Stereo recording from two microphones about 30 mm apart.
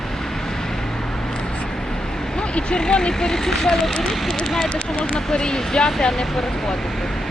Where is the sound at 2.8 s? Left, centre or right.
Left.